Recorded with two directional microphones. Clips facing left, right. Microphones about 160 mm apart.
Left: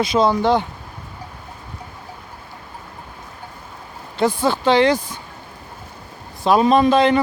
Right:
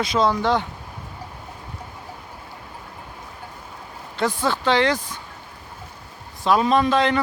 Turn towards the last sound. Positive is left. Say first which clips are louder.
# left 4 dB
turn(degrees=10)  # may be behind; listen again after turning